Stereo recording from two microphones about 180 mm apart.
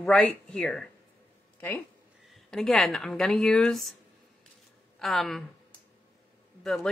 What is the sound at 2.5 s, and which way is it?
Speech, centre (ahead or behind).